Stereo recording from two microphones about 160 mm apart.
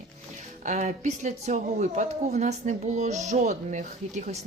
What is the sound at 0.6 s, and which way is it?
Speech, 50° right (ahead or behind).